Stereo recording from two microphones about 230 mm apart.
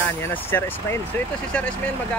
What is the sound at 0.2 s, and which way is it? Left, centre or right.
Speech, centre.